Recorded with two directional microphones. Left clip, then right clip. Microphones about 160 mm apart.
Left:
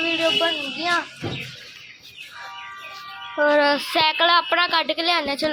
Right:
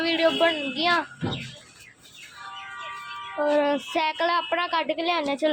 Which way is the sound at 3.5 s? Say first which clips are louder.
Left 4 dB; 5° right (ahead or behind).